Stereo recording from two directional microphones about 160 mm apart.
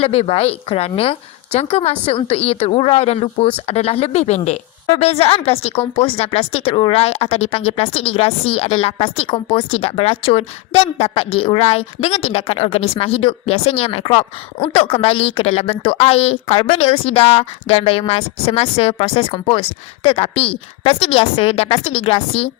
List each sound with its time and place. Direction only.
0.0 s a woman's voice: 40° left (ahead or behind)